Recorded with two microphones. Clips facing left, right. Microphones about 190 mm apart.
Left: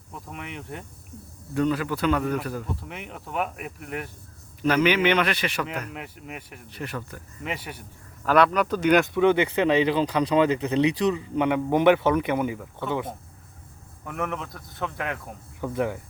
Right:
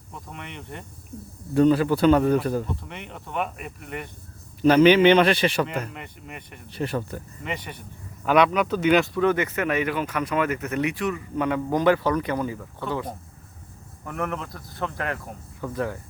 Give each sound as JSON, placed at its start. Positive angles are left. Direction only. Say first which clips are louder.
{"t": 0.1, "sound": "a man's voice", "louder": "left 2 dB", "side_deg": 5}
{"t": 1.5, "sound": "a man's voice", "louder": "right 6 dB", "side_deg": -30}
{"t": 2.8, "sound": "a man's voice", "louder": "even", "side_deg": 5}
{"t": 4.6, "sound": "a man's voice", "louder": "right 6 dB", "side_deg": -30}
{"t": 5.9, "sound": "a man's voice", "louder": "left 2 dB", "side_deg": 5}
{"t": 6.7, "sound": "speech", "louder": "right 7 dB", "side_deg": -30}
{"t": 7.4, "sound": "a man's voice", "louder": "left 1 dB", "side_deg": 5}
{"t": 8.2, "sound": "a man's voice", "louder": "right 1 dB", "side_deg": -5}
{"t": 9.1, "sound": "speech", "louder": "left 2 dB", "side_deg": 20}
{"t": 14.0, "sound": "a man's voice", "louder": "right 1 dB", "side_deg": 0}
{"t": 15.6, "sound": "speech", "louder": "left 2 dB", "side_deg": 15}